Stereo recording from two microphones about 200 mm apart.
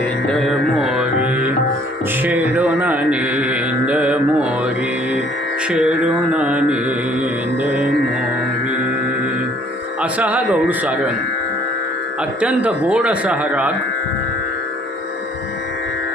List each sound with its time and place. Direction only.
0.3 s music: centre (ahead or behind)
2.2 s mantra: 5° right (ahead or behind)
10.0 s speech: 5° right (ahead or behind)
12.4 s speech: 5° right (ahead or behind)